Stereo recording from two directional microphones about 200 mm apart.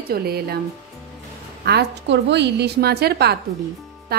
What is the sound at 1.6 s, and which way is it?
A woman's voice, 55° right (ahead or behind).